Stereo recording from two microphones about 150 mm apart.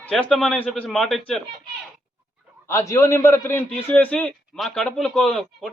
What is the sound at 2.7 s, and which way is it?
A man's voice, 20° left (ahead or behind).